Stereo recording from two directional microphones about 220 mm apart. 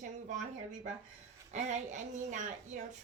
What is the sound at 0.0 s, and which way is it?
Speech, 35° right (ahead or behind).